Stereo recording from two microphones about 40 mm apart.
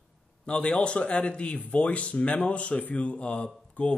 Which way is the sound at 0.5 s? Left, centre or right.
Left.